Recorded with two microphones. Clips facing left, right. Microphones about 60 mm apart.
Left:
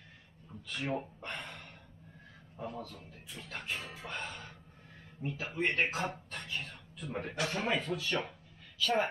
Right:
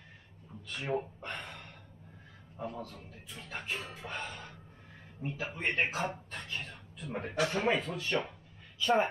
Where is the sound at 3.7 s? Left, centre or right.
Centre.